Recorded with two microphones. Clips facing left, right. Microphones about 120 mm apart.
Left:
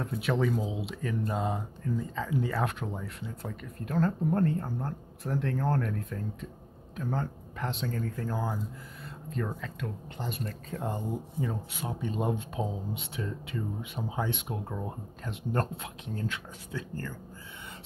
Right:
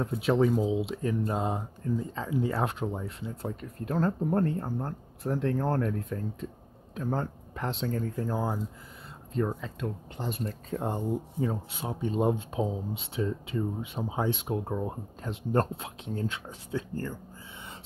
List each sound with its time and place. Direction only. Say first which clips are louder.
0.0 s speech: right 4 dB; 30° right (ahead or behind)